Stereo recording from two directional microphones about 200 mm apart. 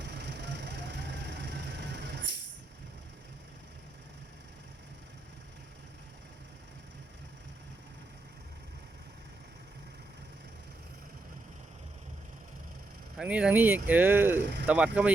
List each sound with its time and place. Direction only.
0.0 s vehicle: 60° right (ahead or behind)
13.1 s speech: 5° right (ahead or behind)